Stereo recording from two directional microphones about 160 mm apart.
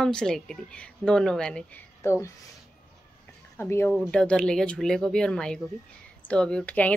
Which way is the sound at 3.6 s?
15° left (ahead or behind).